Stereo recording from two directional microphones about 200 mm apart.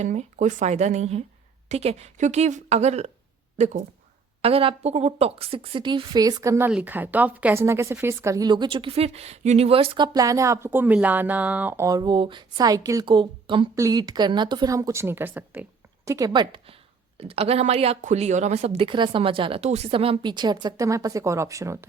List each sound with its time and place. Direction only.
0.0 s a woman's voice: 35° right (ahead or behind)
4.4 s a woman's voice: 30° right (ahead or behind)